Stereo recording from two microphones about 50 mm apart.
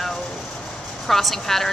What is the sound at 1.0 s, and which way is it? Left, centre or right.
Speech, centre.